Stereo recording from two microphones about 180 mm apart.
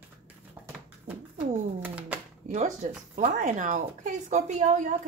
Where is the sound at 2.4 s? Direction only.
40° right (ahead or behind).